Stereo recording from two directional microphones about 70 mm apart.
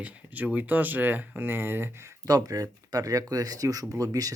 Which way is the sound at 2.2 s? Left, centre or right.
Right.